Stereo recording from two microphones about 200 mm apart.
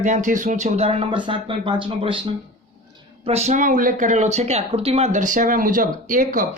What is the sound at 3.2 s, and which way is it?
Speech, 35° right (ahead or behind).